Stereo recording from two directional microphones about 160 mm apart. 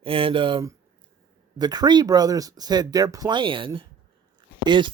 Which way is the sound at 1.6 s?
25° right (ahead or behind).